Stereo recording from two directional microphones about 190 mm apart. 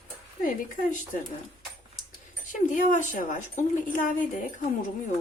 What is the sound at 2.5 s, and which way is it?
A woman's voice, 45° left (ahead or behind).